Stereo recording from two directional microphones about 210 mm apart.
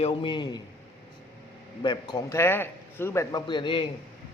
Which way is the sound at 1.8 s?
20° left (ahead or behind).